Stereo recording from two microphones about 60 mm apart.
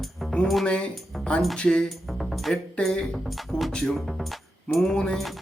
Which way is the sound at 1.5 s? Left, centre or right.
Centre.